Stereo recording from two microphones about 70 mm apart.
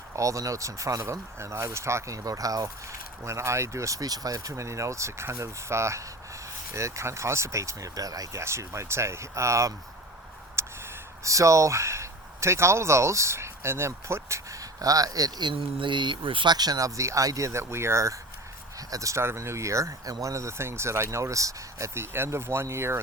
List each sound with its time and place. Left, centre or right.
0.2 s speech: right
3.2 s speech: right
10.6 s a sound: right
11.2 s speech: right
19.2 s speech: right
22.1 s speech: right